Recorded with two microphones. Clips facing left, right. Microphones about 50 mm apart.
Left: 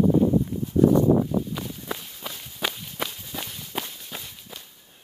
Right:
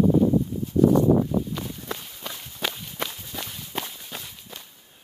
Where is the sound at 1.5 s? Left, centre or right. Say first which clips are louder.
Even; centre.